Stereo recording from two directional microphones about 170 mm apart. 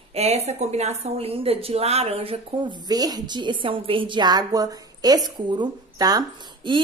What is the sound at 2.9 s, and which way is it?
A woman's voice, 20° right (ahead or behind).